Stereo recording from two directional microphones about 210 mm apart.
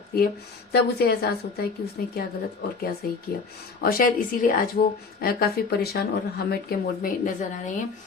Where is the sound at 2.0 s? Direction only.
45° left (ahead or behind).